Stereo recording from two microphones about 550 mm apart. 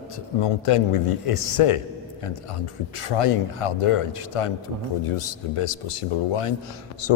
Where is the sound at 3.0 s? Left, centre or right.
Left.